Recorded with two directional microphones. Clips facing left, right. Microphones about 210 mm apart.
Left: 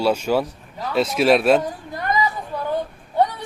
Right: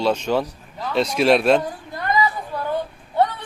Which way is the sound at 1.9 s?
20° left (ahead or behind).